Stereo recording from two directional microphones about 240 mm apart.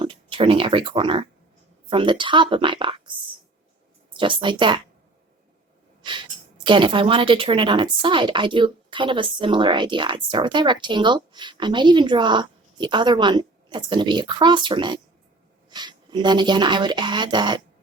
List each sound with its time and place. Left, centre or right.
0.0 s a woman's voice: right
6.6 s a woman's voice: centre